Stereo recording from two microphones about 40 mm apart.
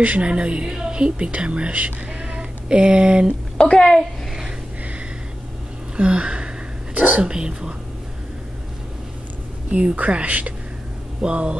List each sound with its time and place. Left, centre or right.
0.0 s speech: right
3.6 s a woman's voice: left
5.9 s a sound: right
6.9 s speech: right
7.2 s speech: right
9.7 s speech: right